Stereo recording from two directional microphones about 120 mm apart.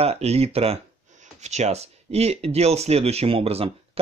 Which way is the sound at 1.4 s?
70° right (ahead or behind).